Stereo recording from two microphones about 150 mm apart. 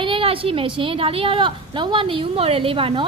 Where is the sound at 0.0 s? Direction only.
35° right (ahead or behind).